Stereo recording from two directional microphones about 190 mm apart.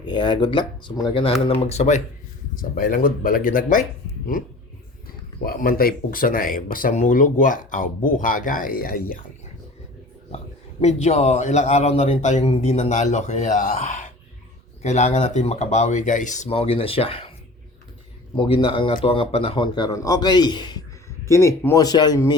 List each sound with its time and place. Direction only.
0.0 s a man's voice: 25° left (ahead or behind)
2.6 s speech: 45° left (ahead or behind)
5.4 s speech: 50° left (ahead or behind)
10.3 s a man's voice: 35° left (ahead or behind)
18.3 s a man's voice: 30° left (ahead or behind)